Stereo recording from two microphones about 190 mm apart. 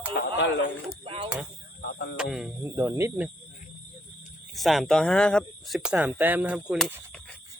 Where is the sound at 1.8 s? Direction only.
60° left (ahead or behind).